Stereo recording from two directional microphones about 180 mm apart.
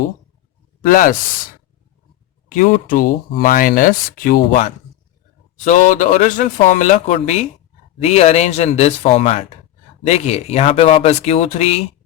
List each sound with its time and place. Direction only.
0.8 s speech: 50° left (ahead or behind)
2.5 s speech: 50° left (ahead or behind)
5.6 s speech: 45° left (ahead or behind)